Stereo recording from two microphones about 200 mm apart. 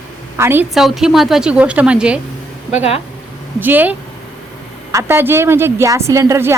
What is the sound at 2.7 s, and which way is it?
Speech, 30° left (ahead or behind).